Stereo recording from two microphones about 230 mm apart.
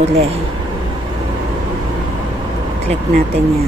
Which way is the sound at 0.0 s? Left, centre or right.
Right.